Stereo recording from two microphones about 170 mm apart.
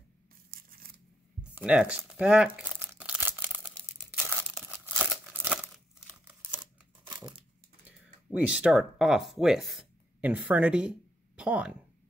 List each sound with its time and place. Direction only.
1.4 s crumpling: 5° right (ahead or behind)
4.1 s tearing: 10° right (ahead or behind)
4.6 s crumpling: 10° right (ahead or behind)
6.6 s crumpling: 25° right (ahead or behind)
7.8 s speech: 5° right (ahead or behind)